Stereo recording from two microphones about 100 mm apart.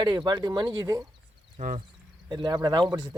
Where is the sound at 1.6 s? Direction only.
90° right.